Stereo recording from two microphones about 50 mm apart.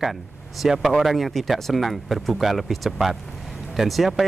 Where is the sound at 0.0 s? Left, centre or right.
Centre.